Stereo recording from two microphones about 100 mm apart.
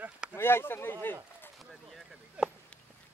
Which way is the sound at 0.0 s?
10° right (ahead or behind).